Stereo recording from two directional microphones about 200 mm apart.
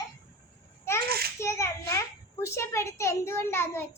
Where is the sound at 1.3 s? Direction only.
15° left (ahead or behind).